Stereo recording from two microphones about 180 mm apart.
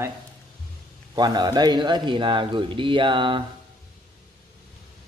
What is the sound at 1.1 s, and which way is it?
Speech, 25° right (ahead or behind).